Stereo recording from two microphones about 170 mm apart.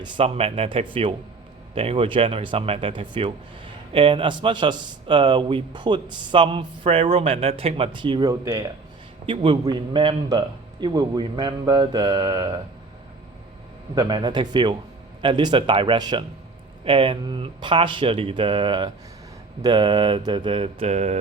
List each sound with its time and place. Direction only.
0.0 s speech: 35° right (ahead or behind); by 8.7 s 20° right (ahead or behind)
9.2 s speech: 30° right (ahead or behind)
13.9 s speech: 25° right (ahead or behind); by 21.2 s 40° right (ahead or behind)